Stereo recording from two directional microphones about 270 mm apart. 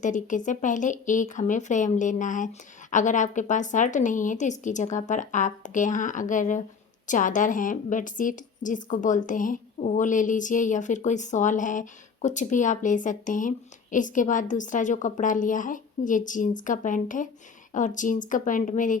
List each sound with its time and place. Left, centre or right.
0.0 s speech: left